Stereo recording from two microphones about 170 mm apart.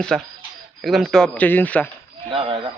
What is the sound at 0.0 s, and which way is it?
Speech, 5° left (ahead or behind).